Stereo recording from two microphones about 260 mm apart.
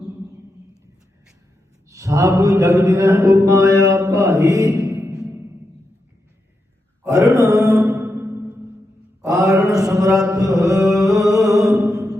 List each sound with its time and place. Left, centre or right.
1.9 s mantra: centre
7.0 s mantra: centre
10.8 s music: centre